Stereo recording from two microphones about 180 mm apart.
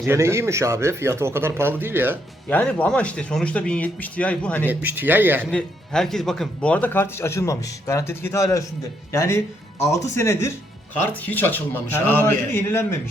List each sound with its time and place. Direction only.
0.0 s speech: 15° right (ahead or behind)
2.5 s speech: 10° left (ahead or behind)
4.7 s speech: 10° right (ahead or behind)
5.5 s speech: 5° left (ahead or behind)